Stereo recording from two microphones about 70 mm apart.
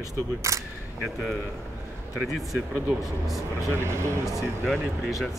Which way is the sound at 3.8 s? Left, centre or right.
Right.